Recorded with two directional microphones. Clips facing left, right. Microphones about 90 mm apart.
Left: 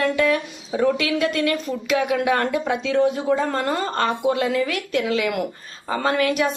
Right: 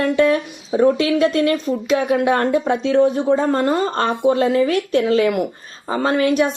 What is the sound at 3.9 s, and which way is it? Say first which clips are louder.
A woman's voice: right 4 dB; 35° right (ahead or behind).